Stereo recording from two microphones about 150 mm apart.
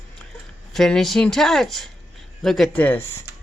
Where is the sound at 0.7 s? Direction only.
Centre (ahead or behind).